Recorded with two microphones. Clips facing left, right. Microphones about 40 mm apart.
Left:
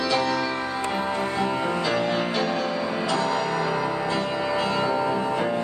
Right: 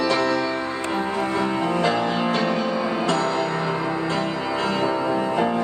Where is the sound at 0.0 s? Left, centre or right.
Centre.